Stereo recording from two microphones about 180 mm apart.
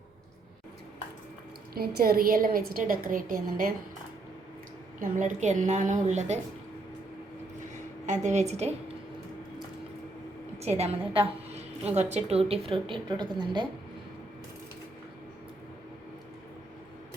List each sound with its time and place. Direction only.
1.7 s a woman's voice: 60° right (ahead or behind)
4.9 s a woman's voice: 45° right (ahead or behind)
8.0 s a woman's voice: 40° right (ahead or behind)
10.6 s a woman's voice: 35° right (ahead or behind)